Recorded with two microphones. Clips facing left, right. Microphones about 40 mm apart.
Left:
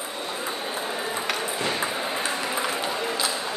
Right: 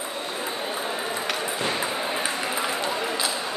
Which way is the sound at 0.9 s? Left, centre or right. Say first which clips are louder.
Even; centre.